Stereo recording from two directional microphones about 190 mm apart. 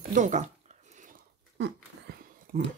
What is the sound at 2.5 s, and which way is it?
Speech, 45° right (ahead or behind).